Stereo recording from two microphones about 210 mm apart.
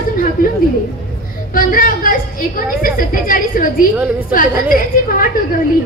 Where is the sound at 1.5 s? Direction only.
40° left (ahead or behind).